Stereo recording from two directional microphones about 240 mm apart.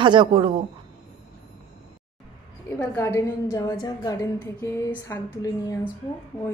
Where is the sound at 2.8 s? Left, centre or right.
Centre.